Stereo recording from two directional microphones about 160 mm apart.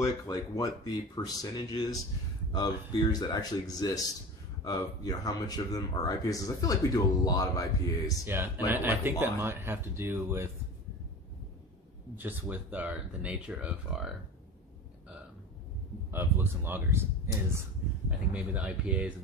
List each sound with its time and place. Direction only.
0.0 s speech: 20° left (ahead or behind)
8.3 s speech: 15° right (ahead or behind)
12.2 s speech: 10° right (ahead or behind)
16.1 s speech: 15° right (ahead or behind)